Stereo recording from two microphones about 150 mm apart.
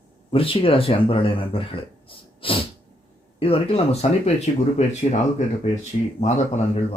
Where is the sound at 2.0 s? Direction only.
35° left (ahead or behind).